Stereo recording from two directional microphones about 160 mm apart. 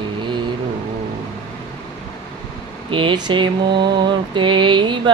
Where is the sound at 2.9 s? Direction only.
30° right (ahead or behind).